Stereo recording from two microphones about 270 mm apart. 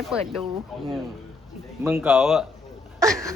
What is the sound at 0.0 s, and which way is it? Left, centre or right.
Speech, centre.